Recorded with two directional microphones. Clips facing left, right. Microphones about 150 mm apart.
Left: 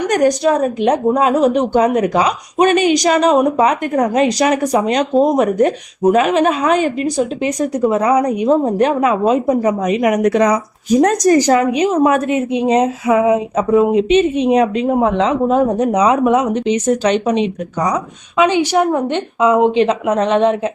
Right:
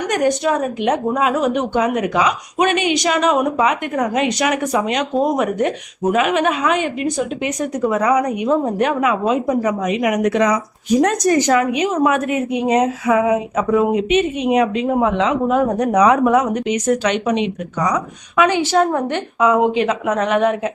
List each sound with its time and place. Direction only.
0.1 s a woman's voice: 35° left (ahead or behind)